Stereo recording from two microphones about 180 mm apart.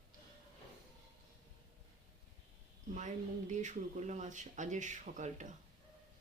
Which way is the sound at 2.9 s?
40° right (ahead or behind).